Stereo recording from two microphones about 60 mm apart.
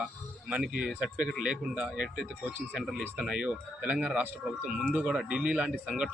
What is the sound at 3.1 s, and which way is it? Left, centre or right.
Speech, centre.